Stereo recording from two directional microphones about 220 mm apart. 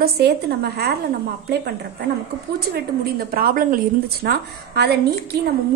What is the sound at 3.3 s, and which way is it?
A woman's voice, 40° right (ahead or behind).